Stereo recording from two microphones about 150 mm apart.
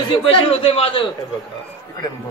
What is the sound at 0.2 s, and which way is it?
Speech, 40° left (ahead or behind).